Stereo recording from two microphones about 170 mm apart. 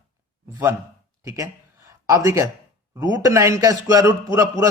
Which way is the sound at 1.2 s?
15° right (ahead or behind).